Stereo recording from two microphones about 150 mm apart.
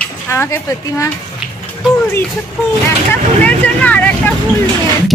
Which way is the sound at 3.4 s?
10° left (ahead or behind).